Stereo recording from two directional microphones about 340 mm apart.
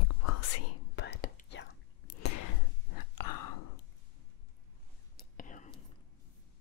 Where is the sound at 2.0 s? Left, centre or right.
Left.